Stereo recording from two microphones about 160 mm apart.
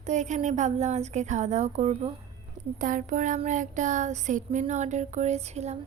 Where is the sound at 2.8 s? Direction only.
55° right (ahead or behind).